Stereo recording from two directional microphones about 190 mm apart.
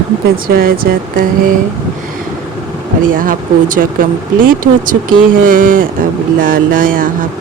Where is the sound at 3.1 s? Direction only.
45° right (ahead or behind).